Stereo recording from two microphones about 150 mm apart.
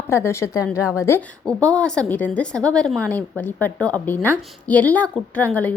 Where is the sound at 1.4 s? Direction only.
5° left (ahead or behind).